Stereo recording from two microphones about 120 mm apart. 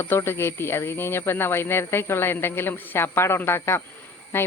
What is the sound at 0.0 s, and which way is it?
Speech, 20° left (ahead or behind).